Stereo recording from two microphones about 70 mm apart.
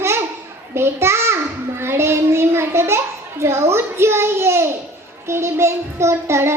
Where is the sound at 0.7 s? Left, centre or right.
Right.